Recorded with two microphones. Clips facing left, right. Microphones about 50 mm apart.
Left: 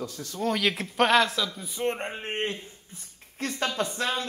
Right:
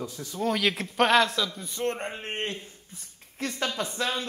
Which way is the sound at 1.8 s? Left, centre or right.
Centre.